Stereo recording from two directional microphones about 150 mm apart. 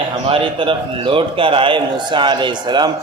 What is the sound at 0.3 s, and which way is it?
A man's voice, 35° right (ahead or behind).